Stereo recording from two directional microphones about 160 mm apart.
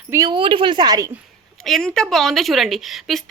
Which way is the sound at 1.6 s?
Centre (ahead or behind).